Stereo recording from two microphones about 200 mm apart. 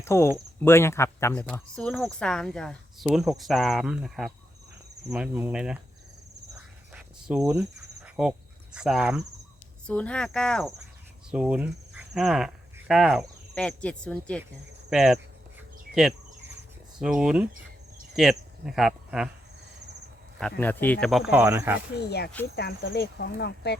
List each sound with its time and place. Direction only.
0.0 s speech: 15° left (ahead or behind); by 5.8 s 5° right (ahead or behind)
6.9 s cricket: centre (ahead or behind)
9.8 s speech: 5° left (ahead or behind)
20.6 s speech: 10° left (ahead or behind); by 21.8 s 10° right (ahead or behind)
21.9 s speech: 55° left (ahead or behind)